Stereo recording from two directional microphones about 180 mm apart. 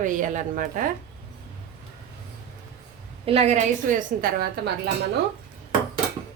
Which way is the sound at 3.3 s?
35° right (ahead or behind).